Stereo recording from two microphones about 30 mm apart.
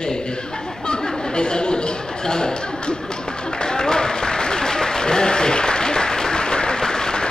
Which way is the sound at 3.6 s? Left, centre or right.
Left.